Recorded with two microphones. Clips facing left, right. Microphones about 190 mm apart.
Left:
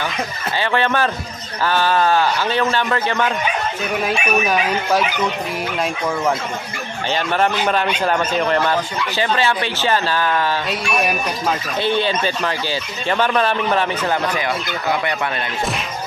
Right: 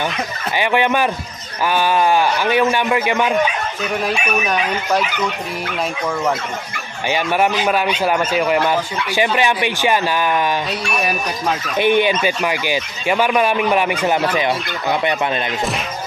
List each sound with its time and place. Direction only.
0.6 s speech: 15° right (ahead or behind)
4.0 s speech: centre (ahead or behind)
7.1 s speech: 10° right (ahead or behind)
11.8 s speech: 15° right (ahead or behind)